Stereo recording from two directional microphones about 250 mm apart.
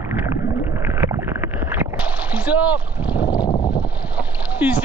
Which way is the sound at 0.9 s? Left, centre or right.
Centre.